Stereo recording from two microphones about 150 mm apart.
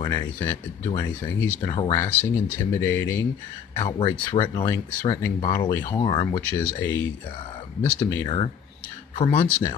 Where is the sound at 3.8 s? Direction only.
30° left (ahead or behind).